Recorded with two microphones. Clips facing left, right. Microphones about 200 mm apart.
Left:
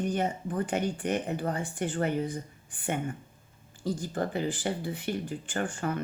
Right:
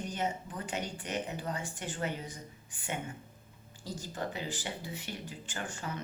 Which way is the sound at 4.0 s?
55° left (ahead or behind).